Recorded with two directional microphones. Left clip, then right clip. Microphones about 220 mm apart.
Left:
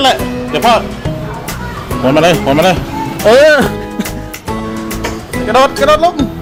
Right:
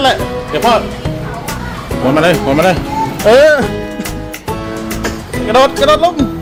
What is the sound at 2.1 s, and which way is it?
Speech, 15° left (ahead or behind).